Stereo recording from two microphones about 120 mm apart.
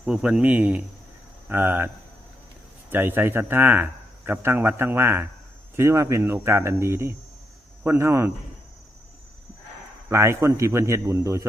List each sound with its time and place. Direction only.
0.0 s speech: 5° right (ahead or behind)
2.9 s speech: 15° right (ahead or behind)
10.1 s speech: 20° right (ahead or behind)